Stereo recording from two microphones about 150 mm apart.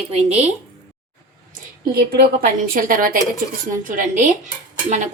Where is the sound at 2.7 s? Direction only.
70° right (ahead or behind).